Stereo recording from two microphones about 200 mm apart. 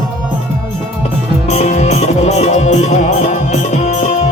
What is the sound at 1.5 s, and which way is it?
Music, 35° left (ahead or behind).